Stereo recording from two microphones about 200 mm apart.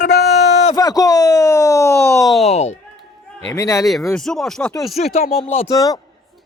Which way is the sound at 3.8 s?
Centre (ahead or behind).